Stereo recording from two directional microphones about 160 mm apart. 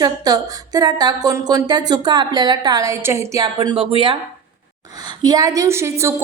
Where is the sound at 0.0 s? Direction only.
25° right (ahead or behind).